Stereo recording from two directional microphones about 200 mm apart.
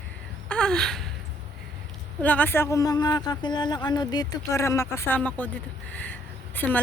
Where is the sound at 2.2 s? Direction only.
10° left (ahead or behind).